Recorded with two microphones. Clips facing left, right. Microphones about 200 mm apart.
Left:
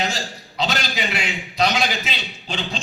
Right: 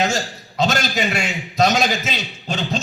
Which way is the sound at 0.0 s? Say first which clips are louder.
Right 5 dB; 45° right (ahead or behind).